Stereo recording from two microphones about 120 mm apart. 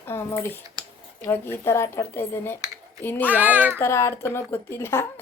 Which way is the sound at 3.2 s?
15° right (ahead or behind).